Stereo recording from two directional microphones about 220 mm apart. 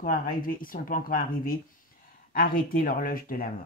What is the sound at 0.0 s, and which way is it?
Speech, 40° left (ahead or behind).